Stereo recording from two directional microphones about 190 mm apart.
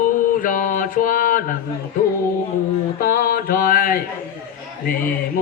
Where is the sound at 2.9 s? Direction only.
50° left (ahead or behind).